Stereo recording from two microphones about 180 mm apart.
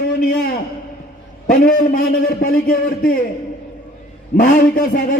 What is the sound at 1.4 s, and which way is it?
A man's voice, 55° left (ahead or behind).